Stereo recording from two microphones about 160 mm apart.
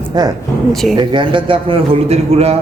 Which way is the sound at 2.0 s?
40° right (ahead or behind).